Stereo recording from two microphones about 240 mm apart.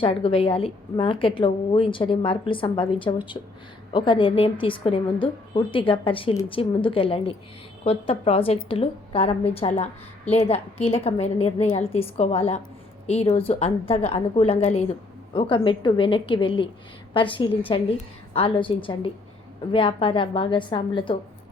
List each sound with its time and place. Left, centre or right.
0.0 s a woman's voice: left